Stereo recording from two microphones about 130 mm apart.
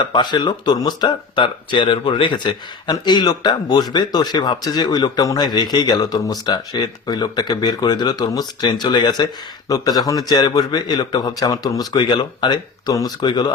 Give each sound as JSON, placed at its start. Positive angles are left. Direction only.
{"t": 0.0, "sound": "speech", "side_deg": 35}